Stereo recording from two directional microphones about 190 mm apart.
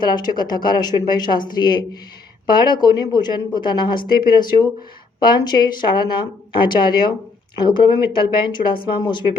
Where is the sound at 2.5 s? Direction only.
25° left (ahead or behind).